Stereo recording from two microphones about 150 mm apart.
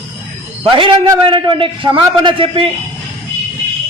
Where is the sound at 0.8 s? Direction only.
30° right (ahead or behind).